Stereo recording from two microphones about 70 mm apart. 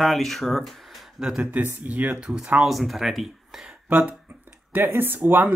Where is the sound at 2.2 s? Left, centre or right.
Centre.